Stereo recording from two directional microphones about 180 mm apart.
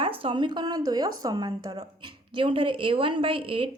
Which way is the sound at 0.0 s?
30° right (ahead or behind).